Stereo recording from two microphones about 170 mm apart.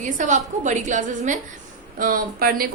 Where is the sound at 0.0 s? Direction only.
45° right (ahead or behind).